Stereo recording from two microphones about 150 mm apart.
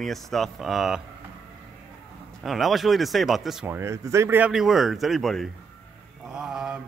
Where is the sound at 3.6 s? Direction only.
15° right (ahead or behind).